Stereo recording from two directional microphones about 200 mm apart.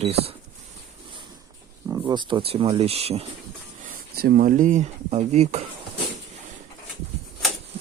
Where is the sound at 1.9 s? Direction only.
15° right (ahead or behind).